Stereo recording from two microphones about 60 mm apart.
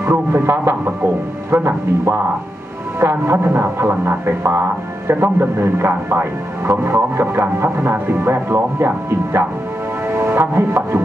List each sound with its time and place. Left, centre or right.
0.0 s speech: right
5.1 s speech: right
10.1 s chopping: right